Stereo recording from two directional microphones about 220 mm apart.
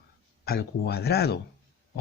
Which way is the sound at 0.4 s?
45° left (ahead or behind).